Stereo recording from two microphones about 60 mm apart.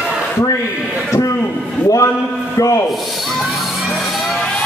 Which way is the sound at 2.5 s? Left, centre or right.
Left.